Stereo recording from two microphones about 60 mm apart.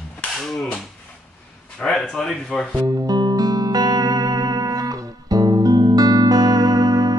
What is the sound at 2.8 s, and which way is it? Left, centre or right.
Music, right.